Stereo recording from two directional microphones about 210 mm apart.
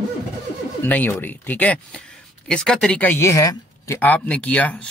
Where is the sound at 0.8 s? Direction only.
10° left (ahead or behind).